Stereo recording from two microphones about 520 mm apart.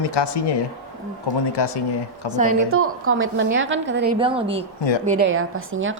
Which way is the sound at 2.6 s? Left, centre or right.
Right.